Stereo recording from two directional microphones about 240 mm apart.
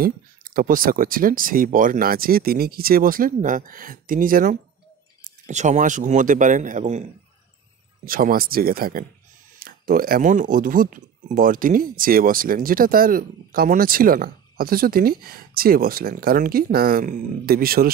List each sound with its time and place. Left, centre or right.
0.0 s speech: right